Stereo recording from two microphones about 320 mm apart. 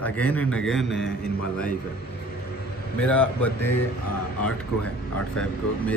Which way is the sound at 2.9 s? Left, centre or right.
Centre.